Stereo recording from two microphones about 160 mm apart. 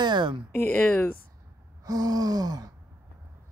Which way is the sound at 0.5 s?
10° left (ahead or behind).